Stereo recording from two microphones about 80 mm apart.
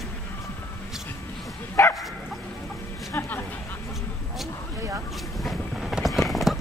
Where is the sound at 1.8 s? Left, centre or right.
Left.